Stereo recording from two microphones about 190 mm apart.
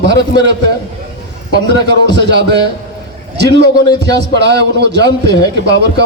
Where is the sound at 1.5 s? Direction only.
65° right (ahead or behind).